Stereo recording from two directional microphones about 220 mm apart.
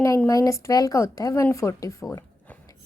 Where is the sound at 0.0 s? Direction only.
15° left (ahead or behind).